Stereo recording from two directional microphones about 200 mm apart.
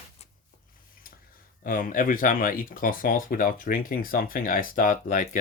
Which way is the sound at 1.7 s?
45° left (ahead or behind).